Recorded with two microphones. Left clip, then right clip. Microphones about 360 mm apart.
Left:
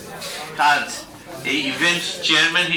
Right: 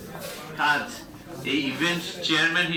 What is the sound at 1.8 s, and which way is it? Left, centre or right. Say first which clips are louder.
Speech: left 7 dB; centre.